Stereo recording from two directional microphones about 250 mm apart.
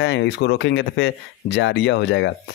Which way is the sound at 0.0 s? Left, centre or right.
Left.